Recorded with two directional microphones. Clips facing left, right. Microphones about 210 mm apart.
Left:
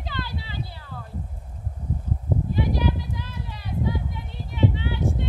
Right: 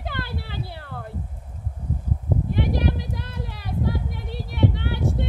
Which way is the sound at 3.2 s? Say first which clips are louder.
Right 2 dB; 65° right (ahead or behind).